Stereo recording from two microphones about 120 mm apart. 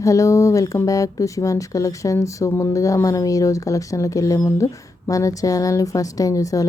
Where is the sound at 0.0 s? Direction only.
25° left (ahead or behind).